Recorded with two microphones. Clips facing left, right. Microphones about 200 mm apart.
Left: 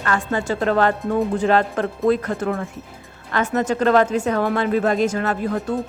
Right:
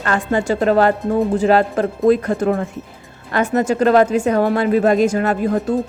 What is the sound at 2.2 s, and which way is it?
Speech, 30° right (ahead or behind).